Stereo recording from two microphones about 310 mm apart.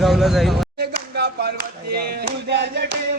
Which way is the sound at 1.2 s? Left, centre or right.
Right.